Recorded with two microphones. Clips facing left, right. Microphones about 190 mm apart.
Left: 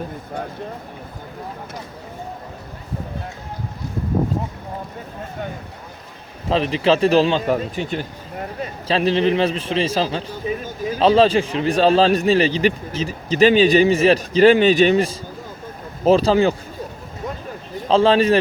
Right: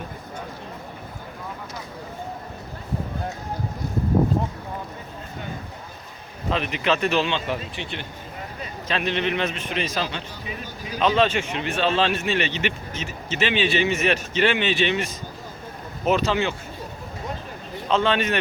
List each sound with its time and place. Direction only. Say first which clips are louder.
6.5 s a man's voice: left 6 dB; 30° left (ahead or behind)
17.8 s a man's voice: left 7 dB; 35° left (ahead or behind)